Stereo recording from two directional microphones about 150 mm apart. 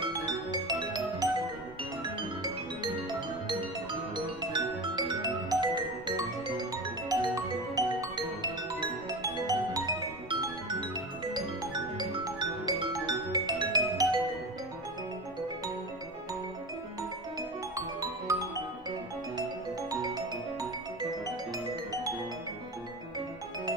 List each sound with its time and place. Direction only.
0.0 s music: 30° right (ahead or behind)
2.4 s music: 30° right (ahead or behind)
19.9 s music: 25° right (ahead or behind)